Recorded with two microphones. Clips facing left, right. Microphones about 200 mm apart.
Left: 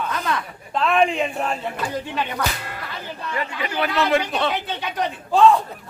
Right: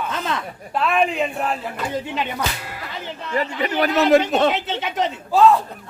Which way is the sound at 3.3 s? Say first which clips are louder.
Right 5 dB; 40° right (ahead or behind).